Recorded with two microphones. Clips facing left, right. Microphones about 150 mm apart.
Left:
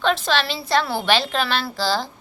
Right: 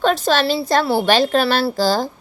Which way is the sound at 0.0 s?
40° right (ahead or behind).